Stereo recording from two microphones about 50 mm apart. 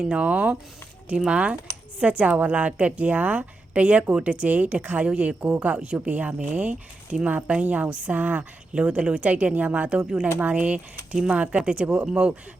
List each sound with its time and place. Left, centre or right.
0.0 s a woman's voice: right
5.0 s a woman's voice: right
8.7 s a woman's voice: right